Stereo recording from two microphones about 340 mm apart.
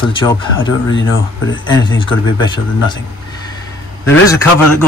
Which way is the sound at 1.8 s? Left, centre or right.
Centre.